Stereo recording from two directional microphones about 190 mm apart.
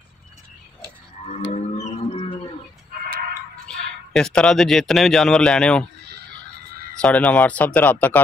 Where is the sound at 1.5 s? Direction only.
30° left (ahead or behind).